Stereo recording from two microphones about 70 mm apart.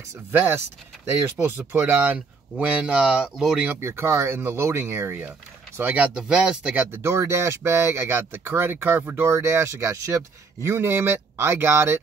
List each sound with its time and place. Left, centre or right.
0.3 s speech: right
2.1 s speech: centre
3.8 s speech: right; by 6.9 s centre
6.9 s speech: right